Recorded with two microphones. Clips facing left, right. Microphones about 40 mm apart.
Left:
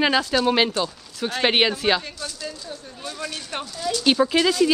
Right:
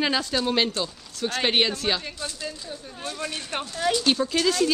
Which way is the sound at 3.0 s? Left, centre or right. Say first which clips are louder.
Even; centre.